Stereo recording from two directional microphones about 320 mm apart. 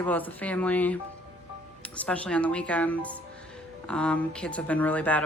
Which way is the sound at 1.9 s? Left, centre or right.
Centre.